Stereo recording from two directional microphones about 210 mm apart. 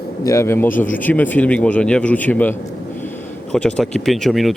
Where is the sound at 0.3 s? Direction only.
15° left (ahead or behind).